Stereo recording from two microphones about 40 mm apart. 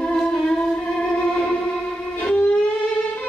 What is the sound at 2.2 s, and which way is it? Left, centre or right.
Music, left.